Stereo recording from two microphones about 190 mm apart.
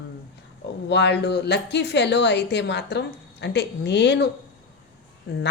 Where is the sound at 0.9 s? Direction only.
65° left (ahead or behind).